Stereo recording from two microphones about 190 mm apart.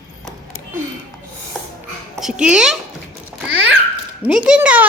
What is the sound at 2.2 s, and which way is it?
Speech, 5° right (ahead or behind).